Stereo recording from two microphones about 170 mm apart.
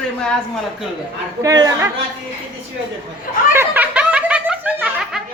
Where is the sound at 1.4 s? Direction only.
20° right (ahead or behind).